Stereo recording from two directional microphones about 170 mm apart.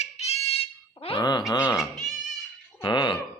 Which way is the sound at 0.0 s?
40° left (ahead or behind).